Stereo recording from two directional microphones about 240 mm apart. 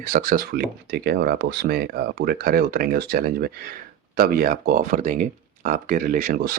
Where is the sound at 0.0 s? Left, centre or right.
Right.